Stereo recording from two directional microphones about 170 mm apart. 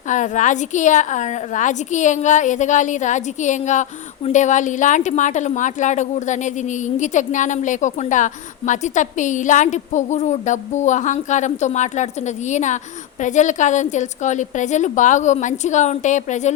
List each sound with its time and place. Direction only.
0.1 s a woman's voice: 45° left (ahead or behind)